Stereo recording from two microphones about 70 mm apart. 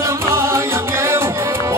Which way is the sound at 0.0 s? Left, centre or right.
Right.